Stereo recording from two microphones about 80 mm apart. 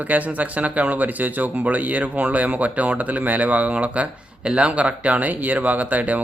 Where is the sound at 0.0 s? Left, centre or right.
Centre.